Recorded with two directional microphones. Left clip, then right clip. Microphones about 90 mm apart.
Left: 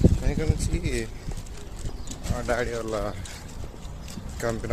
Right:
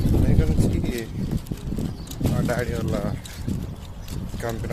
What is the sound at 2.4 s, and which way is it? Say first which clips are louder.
Speech: left 1 dB; 30° left (ahead or behind).